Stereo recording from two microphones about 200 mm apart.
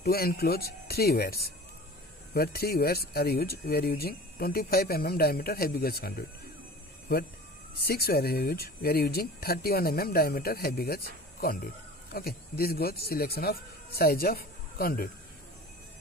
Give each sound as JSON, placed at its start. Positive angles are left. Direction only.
{"t": 0.0, "sound": "speech", "side_deg": 50}
{"t": 7.7, "sound": "speech", "side_deg": 50}